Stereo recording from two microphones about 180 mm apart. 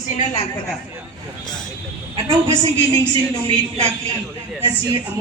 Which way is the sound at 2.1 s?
20° right (ahead or behind).